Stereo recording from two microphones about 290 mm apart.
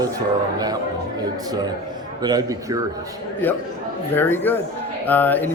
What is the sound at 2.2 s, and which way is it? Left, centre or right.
Speech, centre.